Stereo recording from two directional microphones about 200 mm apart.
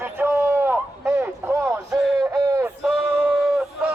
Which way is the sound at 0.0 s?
10° right (ahead or behind).